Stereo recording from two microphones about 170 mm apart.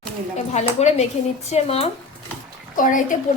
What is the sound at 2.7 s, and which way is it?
Speech, 50° left (ahead or behind).